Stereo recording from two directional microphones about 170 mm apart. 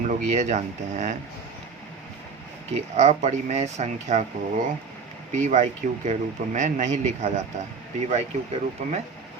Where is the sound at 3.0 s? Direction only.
40° right (ahead or behind).